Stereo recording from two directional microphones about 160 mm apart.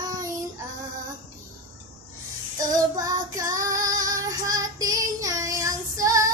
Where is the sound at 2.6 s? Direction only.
20° right (ahead or behind).